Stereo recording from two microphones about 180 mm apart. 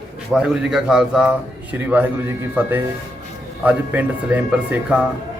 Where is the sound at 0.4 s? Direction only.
5° right (ahead or behind).